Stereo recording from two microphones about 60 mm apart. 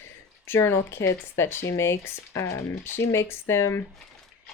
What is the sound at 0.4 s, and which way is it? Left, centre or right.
Speech, left.